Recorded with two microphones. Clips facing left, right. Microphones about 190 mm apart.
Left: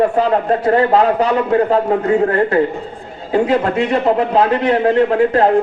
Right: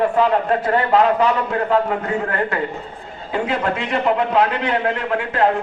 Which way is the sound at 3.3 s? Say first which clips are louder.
Left 6 dB; 40° left (ahead or behind).